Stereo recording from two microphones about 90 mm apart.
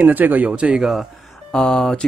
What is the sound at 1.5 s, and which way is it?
Speech, 10° left (ahead or behind).